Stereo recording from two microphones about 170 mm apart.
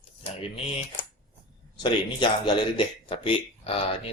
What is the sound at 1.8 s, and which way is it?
Speech, 25° left (ahead or behind).